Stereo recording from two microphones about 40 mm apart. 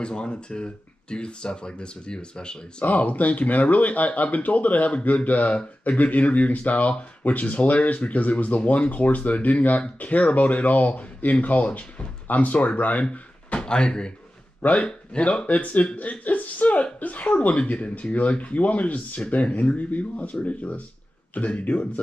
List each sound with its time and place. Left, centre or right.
0.0 s speech: left
2.8 s speech: left
13.1 s speech: left
14.6 s speech: left
15.4 s speech: left